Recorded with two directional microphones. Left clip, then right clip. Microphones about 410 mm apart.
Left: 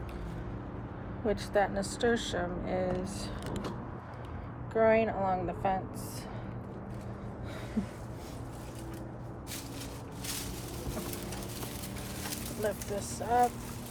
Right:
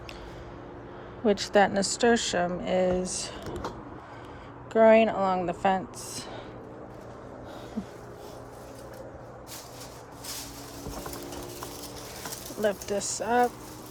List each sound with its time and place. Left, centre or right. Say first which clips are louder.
1.3 s speech: right 7 dB; right
4.7 s speech: right 7 dB; right
12.6 s speech: right 7 dB; right